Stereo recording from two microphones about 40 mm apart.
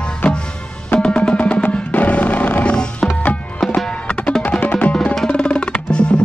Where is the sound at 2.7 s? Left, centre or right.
Left.